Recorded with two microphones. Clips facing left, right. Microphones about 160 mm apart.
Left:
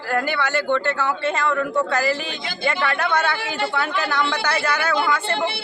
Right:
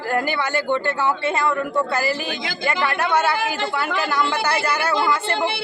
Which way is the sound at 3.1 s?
10° right (ahead or behind).